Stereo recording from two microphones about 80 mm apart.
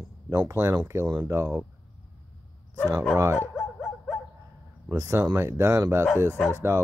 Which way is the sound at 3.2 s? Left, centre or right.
Right.